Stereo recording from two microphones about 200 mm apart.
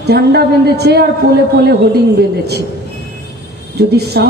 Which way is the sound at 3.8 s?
55° right (ahead or behind).